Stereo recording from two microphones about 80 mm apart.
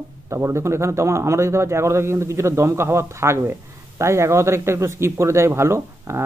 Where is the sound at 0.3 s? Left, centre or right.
Right.